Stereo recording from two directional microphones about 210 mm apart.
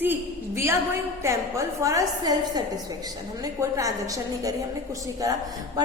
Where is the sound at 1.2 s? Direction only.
15° right (ahead or behind).